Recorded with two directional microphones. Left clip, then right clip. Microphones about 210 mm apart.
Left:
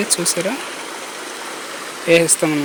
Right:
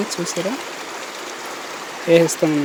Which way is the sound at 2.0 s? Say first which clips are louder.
Even; 15° right (ahead or behind).